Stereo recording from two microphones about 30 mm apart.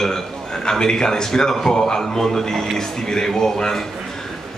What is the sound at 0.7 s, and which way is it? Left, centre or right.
A man's voice, left.